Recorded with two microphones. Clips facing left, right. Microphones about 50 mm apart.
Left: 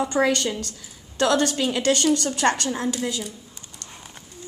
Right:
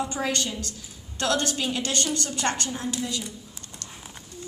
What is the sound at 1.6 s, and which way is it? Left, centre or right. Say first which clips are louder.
A woman's voice: left 6 dB; left.